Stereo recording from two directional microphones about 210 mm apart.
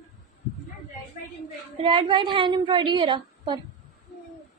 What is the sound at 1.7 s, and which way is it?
A woman's voice, 25° right (ahead or behind).